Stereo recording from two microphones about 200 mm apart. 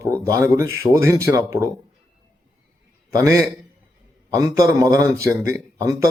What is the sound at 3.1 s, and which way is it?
Speech, 15° right (ahead or behind).